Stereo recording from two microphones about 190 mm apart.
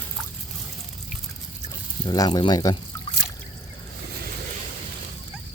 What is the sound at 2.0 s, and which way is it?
Speech, 20° left (ahead or behind).